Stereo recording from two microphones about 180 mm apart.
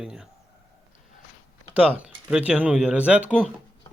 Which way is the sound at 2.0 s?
5° right (ahead or behind).